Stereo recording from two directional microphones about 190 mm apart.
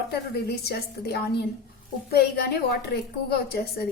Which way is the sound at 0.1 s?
55° left (ahead or behind).